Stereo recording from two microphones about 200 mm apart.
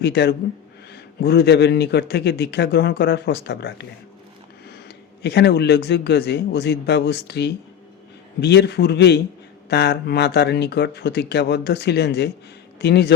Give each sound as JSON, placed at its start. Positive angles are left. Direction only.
{"t": 0.0, "sound": "a man's voice", "side_deg": 55}